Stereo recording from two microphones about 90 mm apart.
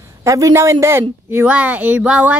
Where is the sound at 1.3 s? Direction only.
20° right (ahead or behind).